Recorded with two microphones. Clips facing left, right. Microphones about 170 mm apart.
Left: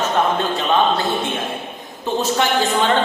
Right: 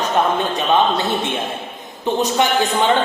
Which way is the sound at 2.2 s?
20° right (ahead or behind).